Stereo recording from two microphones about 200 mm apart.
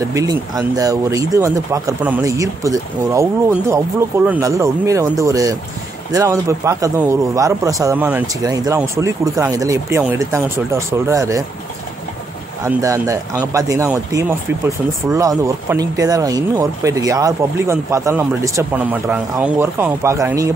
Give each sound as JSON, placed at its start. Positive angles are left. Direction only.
{"t": 0.1, "sound": "speech", "side_deg": -15}
{"t": 12.6, "sound": "speech", "side_deg": -15}